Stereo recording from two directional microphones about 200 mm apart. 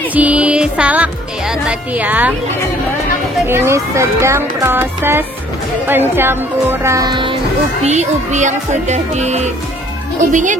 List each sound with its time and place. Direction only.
0.1 s music: 5° right (ahead or behind)
1.7 s speech: 10° right (ahead or behind)
3.4 s speech: 10° right (ahead or behind)
7.8 s speech: 35° right (ahead or behind)